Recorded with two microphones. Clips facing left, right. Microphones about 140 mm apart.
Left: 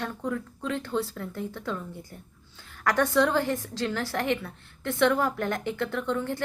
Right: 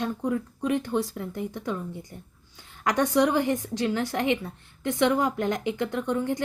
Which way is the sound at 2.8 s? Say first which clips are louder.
Right 1 dB; 20° right (ahead or behind).